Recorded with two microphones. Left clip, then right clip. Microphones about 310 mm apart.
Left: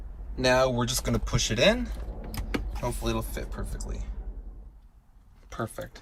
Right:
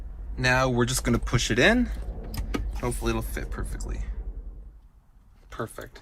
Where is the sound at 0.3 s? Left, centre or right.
Centre.